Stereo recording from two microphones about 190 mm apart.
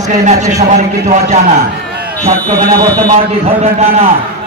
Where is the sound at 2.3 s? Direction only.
50° right (ahead or behind).